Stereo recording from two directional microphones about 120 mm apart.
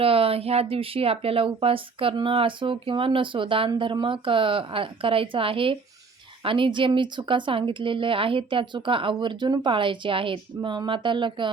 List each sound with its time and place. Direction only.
0.0 s speech: 50° right (ahead or behind)